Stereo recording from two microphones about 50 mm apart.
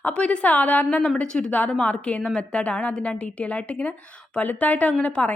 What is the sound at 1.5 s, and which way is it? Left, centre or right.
A woman's voice, left.